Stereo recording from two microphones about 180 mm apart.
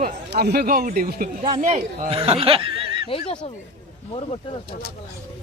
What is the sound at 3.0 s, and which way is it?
Speech, 30° left (ahead or behind).